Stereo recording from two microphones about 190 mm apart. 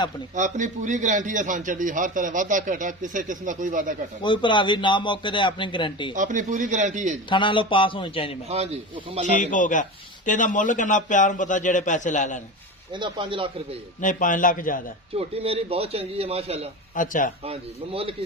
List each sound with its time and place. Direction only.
0.3 s a man's voice: 40° right (ahead or behind)
4.2 s a man's voice: 25° left (ahead or behind)
6.1 s a man's voice: 40° right (ahead or behind)
7.3 s a man's voice: 25° left (ahead or behind)
8.4 s a man's voice: 30° right (ahead or behind)
9.2 s a man's voice: 40° left (ahead or behind)
12.9 s speech: 25° right (ahead or behind)
14.0 s a man's voice: 45° left (ahead or behind)
15.1 s a man's voice: 30° right (ahead or behind)
16.9 s a man's voice: 45° left (ahead or behind)
17.4 s a man's voice: 30° right (ahead or behind)